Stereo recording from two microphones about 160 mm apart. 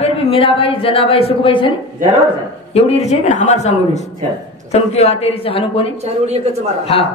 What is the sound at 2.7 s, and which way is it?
A man's voice, 40° left (ahead or behind).